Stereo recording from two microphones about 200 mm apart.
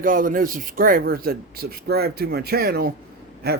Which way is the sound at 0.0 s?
45° right (ahead or behind).